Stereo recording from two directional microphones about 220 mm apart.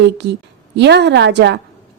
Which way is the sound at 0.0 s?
50° right (ahead or behind).